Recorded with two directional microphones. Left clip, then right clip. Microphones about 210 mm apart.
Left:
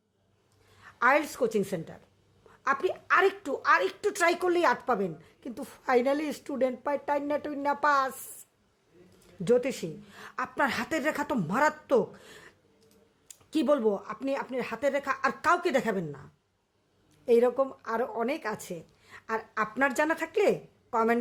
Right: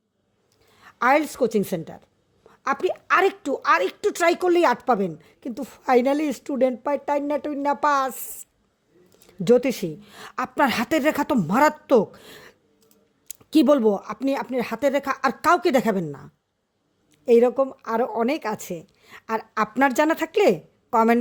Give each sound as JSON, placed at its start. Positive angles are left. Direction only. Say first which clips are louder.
{"t": 0.7, "sound": "a woman's voice", "louder": "right 5 dB", "side_deg": -35}
{"t": 9.4, "sound": "a woman's voice", "louder": "right 7 dB", "side_deg": -35}